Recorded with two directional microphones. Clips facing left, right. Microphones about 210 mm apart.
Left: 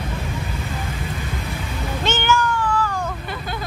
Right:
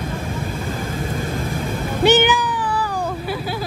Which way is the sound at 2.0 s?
15° right (ahead or behind).